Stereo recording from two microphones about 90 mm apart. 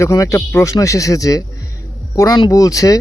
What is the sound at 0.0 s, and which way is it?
Speech, 35° left (ahead or behind).